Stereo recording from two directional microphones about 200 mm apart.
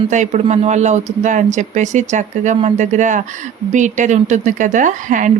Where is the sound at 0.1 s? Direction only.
35° right (ahead or behind).